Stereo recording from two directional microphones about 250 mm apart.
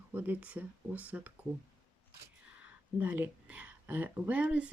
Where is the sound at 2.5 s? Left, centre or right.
Centre.